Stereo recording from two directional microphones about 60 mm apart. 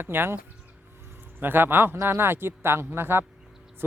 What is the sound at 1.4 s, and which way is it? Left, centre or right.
Speech, right.